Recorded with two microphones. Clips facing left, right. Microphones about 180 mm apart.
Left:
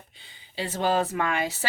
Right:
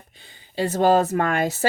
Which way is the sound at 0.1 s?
50° right (ahead or behind).